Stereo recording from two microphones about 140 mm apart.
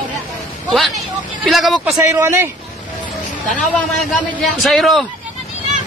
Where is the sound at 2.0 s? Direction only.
20° right (ahead or behind).